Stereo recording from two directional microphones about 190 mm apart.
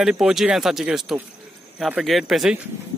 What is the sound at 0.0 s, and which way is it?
Speech, centre (ahead or behind).